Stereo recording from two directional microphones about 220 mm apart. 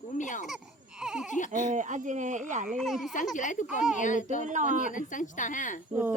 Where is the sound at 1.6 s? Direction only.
35° right (ahead or behind).